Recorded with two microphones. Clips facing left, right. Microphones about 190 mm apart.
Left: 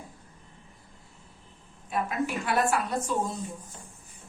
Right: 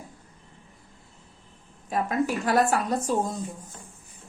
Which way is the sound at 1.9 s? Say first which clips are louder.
Right 4 dB; 40° right (ahead or behind).